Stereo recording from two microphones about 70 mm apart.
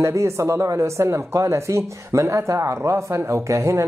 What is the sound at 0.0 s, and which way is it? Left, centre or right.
Speech, right.